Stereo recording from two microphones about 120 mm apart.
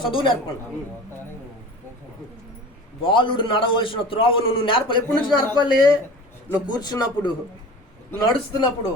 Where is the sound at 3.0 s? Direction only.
45° left (ahead or behind).